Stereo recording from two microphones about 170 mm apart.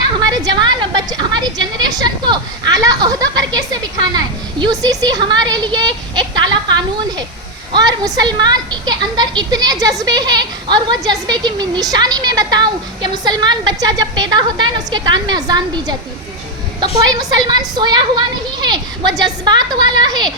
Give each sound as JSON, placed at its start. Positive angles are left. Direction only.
{"t": 0.2, "sound": "a woman's voice", "side_deg": -25}
{"t": 4.6, "sound": "a sound", "side_deg": -20}
{"t": 7.7, "sound": "a woman's voice", "side_deg": -25}